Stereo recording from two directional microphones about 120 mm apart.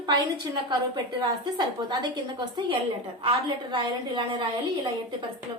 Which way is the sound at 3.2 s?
40° right (ahead or behind).